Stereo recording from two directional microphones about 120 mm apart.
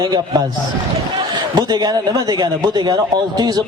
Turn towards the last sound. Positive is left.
turn(degrees=-35)  # may be behind; listen again after turning